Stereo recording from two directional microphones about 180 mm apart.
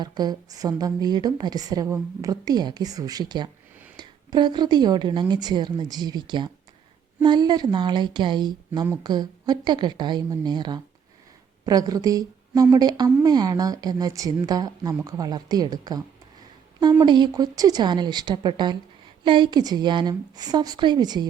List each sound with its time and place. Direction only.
0.0 s a woman's voice: 25° right (ahead or behind)